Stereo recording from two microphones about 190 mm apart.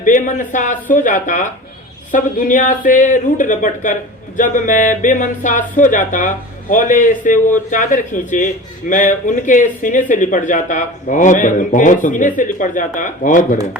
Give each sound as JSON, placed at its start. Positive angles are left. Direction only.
{"t": 0.0, "sound": "speech", "side_deg": 45}